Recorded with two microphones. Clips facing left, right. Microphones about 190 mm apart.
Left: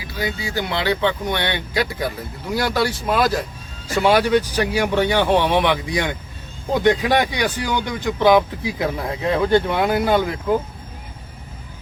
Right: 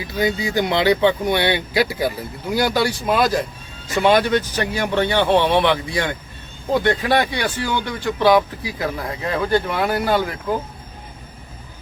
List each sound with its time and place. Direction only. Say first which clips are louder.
0.2 s speech: right 5 dB; 20° right (ahead or behind); by 10.2 s 20° left (ahead or behind)